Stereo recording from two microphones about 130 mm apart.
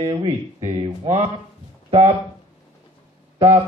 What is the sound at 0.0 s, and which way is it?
Speech, 40° right (ahead or behind).